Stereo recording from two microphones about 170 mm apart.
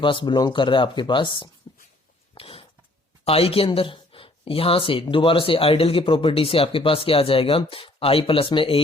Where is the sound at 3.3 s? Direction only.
35° left (ahead or behind).